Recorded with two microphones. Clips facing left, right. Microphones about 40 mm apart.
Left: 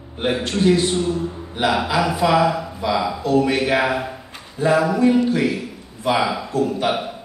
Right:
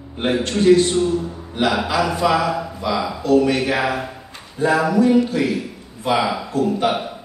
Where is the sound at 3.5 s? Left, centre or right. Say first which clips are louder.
Left 1 dB; left.